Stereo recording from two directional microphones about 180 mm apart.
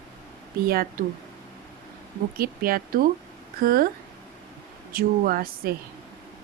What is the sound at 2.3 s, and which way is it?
Speech, 55° right (ahead or behind).